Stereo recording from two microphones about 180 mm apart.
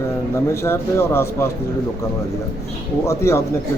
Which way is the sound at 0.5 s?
15° left (ahead or behind).